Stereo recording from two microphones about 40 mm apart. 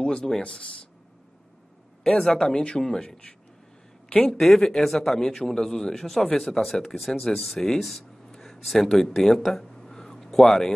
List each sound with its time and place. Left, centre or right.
0.0 s a sound: centre
0.4 s speech: left
2.1 s a man's voice: centre
4.3 s a man's voice: centre